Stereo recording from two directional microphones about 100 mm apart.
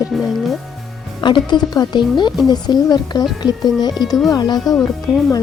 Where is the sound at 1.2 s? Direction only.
50° left (ahead or behind).